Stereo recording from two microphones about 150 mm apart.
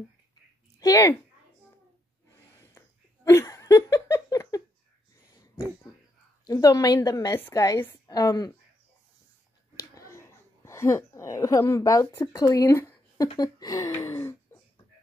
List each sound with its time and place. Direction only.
0.7 s speech: 20° left (ahead or behind)
3.3 s laughter: 20° left (ahead or behind)
5.3 s a sound: 25° left (ahead or behind)
6.4 s a woman's voice: 25° left (ahead or behind)
9.9 s a woman's voice: 20° left (ahead or behind)